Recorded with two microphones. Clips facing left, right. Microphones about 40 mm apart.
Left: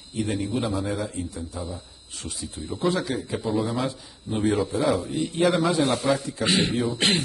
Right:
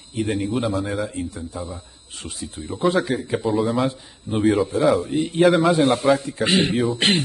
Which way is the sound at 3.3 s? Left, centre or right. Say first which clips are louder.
Right 5 dB; centre.